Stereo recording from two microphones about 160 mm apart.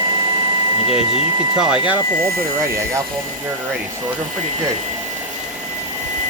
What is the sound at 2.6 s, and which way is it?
Speech, 20° right (ahead or behind).